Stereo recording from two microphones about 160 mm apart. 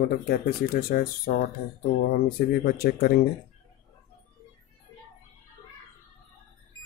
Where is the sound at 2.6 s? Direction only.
75° left (ahead or behind).